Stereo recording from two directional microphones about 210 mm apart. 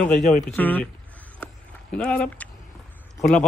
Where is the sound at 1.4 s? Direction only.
5° left (ahead or behind).